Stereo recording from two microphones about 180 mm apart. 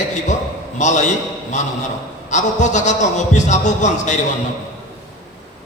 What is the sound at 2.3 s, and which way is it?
A man's voice, 40° left (ahead or behind).